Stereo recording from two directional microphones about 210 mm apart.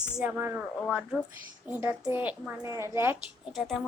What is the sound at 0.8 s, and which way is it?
Speech, centre (ahead or behind).